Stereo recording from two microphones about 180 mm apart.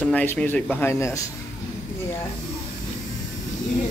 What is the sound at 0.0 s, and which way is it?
Speech, 10° left (ahead or behind).